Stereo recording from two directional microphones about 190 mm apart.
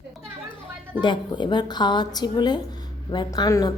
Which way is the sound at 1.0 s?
25° left (ahead or behind).